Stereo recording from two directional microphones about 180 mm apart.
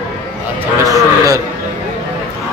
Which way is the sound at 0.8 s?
20° right (ahead or behind).